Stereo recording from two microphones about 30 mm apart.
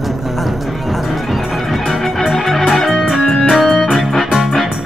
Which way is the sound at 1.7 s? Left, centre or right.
Centre.